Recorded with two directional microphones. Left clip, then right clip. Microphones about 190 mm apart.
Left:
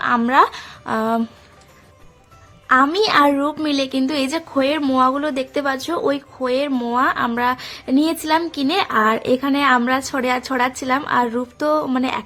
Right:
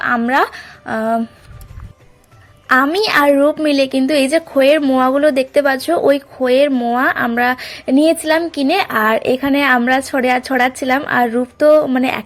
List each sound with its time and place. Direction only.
0.0 s a woman's voice: 5° right (ahead or behind)
2.6 s a woman's voice: 15° right (ahead or behind)
4.8 s a woman's voice: 5° right (ahead or behind)
5.0 s a woman's voice: 15° right (ahead or behind)
7.0 s a woman's voice: 15° right (ahead or behind)